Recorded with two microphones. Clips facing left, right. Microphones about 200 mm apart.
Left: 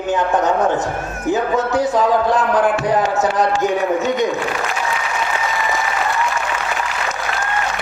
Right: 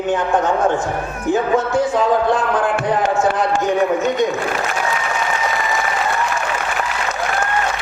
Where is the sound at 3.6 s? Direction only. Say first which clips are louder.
Right 1 dB; centre (ahead or behind).